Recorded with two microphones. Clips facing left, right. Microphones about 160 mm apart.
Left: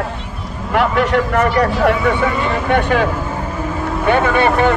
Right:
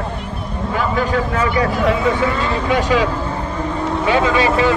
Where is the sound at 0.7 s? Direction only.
70° left (ahead or behind).